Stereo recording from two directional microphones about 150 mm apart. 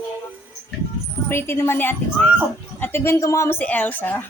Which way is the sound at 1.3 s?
15° left (ahead or behind).